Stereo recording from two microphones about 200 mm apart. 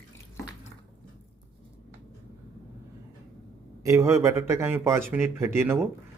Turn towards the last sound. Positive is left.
turn(degrees=-10)  # may be behind; listen again after turning